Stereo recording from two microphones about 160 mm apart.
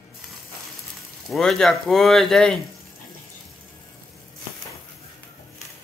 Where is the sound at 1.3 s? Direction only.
Centre (ahead or behind).